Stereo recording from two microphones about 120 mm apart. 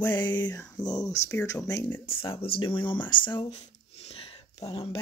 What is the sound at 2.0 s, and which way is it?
Speech, 50° left (ahead or behind).